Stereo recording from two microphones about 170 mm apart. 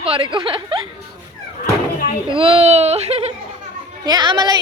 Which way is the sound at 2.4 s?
35° right (ahead or behind).